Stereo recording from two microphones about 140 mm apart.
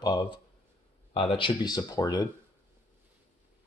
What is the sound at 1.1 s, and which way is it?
Speech, 40° left (ahead or behind).